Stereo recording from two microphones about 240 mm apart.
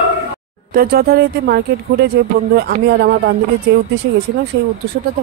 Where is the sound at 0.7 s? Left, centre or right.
Right.